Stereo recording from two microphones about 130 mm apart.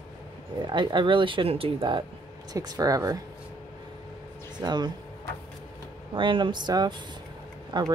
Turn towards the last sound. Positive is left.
turn(degrees=-35)  # may be behind; listen again after turning